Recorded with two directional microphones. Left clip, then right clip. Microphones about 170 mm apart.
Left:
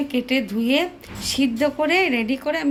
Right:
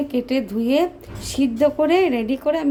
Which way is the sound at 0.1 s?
35° right (ahead or behind).